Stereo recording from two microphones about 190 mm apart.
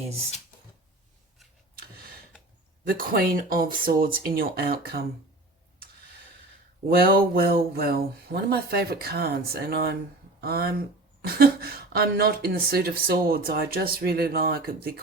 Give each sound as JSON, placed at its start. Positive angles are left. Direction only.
{"t": 3.0, "sound": "speech", "side_deg": -50}
{"t": 6.9, "sound": "speech", "side_deg": -50}